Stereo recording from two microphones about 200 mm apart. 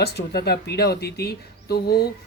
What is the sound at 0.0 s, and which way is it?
Speech, 55° left (ahead or behind).